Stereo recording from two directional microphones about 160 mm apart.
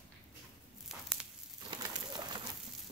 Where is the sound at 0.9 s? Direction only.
Centre (ahead or behind).